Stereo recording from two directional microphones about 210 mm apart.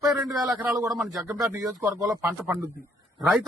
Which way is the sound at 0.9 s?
Centre (ahead or behind).